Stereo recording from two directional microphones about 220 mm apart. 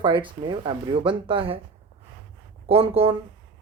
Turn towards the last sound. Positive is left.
turn(degrees=-25)  # may be behind; listen again after turning